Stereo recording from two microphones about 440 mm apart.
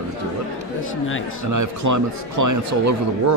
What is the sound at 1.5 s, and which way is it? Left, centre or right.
Speech, right.